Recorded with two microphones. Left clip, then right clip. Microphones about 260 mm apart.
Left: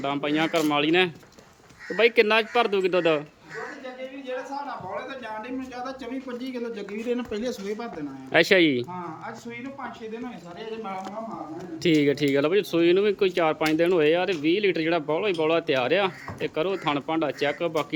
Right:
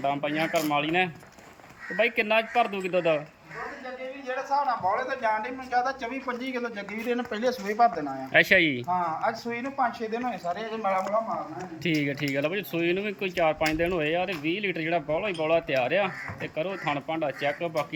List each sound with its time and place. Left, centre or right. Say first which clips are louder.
0.0 s speech: left 2 dB; centre
4.5 s speech: right 7 dB; centre
8.3 s speech: left 2 dB; centre
10.2 s speech: right 6 dB; centre
11.8 s speech: left 7 dB; centre